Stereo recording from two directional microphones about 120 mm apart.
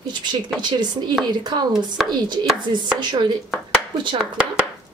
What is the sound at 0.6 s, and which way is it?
Speech, 40° right (ahead or behind).